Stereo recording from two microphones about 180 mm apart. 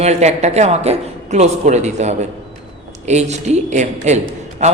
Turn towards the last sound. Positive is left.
turn(degrees=-40)  # may be behind; listen again after turning